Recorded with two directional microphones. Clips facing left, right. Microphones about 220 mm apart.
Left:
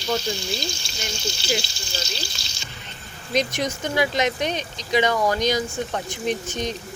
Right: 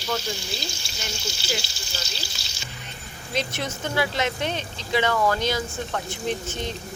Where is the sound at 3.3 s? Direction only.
15° left (ahead or behind).